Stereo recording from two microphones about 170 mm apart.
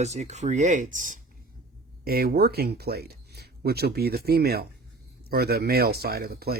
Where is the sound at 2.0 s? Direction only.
60° right (ahead or behind).